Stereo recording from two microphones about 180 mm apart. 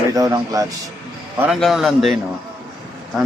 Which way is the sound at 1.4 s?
Centre (ahead or behind).